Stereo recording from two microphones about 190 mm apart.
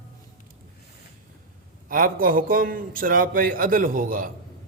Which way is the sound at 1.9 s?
45° right (ahead or behind).